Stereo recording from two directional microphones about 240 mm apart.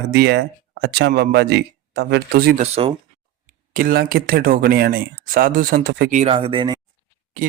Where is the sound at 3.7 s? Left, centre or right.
Right; by 6.8 s centre.